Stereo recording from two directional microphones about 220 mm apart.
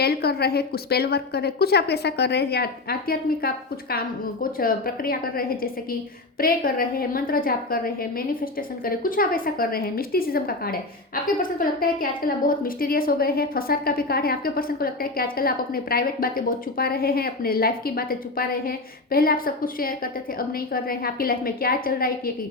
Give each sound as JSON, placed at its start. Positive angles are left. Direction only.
{"t": 0.0, "sound": "a woman's voice", "side_deg": 45}